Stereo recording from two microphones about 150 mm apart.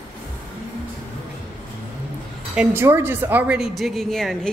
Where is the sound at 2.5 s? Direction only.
15° right (ahead or behind); by 4.5 s centre (ahead or behind).